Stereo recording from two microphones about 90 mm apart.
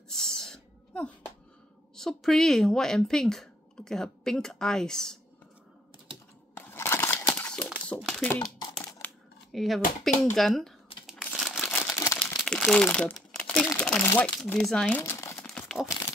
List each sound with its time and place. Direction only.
0.1 s a sound: 5° left (ahead or behind)
2.0 s speech: 5° left (ahead or behind)
6.6 s crumpling: 25° left (ahead or behind); by 8.3 s 5° left (ahead or behind)
9.0 s coin: 20° left (ahead or behind)
9.5 s speech: centre (ahead or behind)
10.9 s crumpling: 90° left
11.3 s crumpling: centre (ahead or behind)
11.9 s crumpling: 35° left (ahead or behind)
12.4 s crumpling: 5° left (ahead or behind)
12.8 s speech: 15° left (ahead or behind)
14.9 s crumpling: 25° left (ahead or behind)
15.3 s crumpling: 5° left (ahead or behind)